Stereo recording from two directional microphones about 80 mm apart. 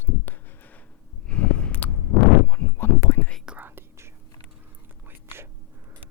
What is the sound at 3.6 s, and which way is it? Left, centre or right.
Whispering, right.